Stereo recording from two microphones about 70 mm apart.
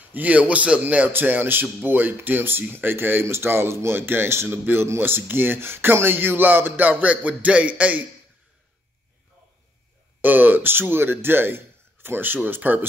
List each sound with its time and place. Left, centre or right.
0.1 s a man's voice: right
10.2 s speech: right